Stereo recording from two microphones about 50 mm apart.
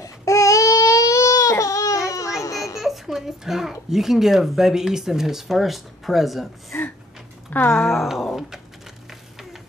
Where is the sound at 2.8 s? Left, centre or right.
Centre.